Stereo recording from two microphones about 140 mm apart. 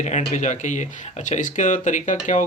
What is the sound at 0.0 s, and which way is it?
Speech, 60° left (ahead or behind).